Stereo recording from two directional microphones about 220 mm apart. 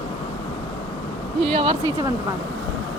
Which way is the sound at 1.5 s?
20° right (ahead or behind).